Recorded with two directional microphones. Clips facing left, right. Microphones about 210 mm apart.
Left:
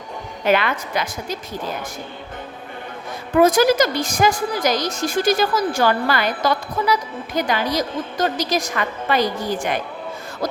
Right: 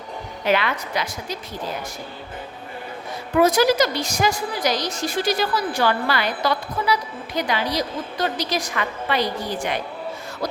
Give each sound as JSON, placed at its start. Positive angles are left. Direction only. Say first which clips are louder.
{"t": 0.4, "sound": "a woman's voice", "louder": "left 3 dB", "side_deg": 50}
{"t": 3.3, "sound": "a woman's voice", "louder": "left 2 dB", "side_deg": 50}